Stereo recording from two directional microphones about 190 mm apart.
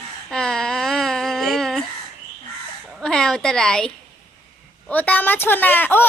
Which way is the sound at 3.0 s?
5° left (ahead or behind).